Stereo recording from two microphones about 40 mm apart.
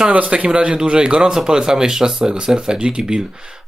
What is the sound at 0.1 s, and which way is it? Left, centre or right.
Speech, right.